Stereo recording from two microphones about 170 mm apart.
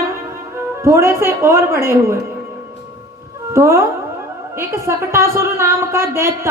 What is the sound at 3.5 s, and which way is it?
Speech, 15° right (ahead or behind).